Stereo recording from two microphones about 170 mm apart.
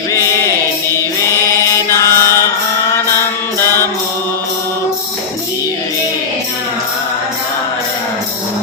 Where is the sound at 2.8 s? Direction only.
15° left (ahead or behind).